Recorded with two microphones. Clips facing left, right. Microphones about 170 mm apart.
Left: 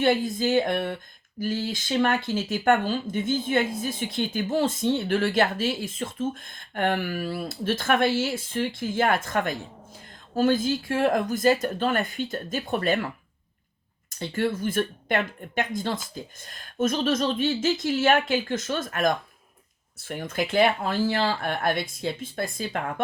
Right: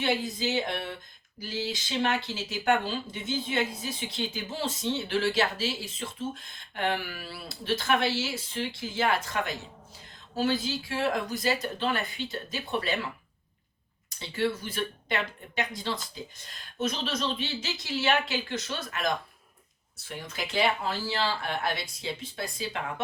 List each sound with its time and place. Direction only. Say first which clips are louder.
0.0 s speech: left 6 dB; 50° left (ahead or behind)
14.2 s speech: left 3 dB; 50° left (ahead or behind)